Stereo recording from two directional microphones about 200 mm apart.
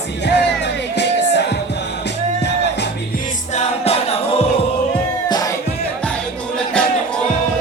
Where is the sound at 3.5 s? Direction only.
30° left (ahead or behind).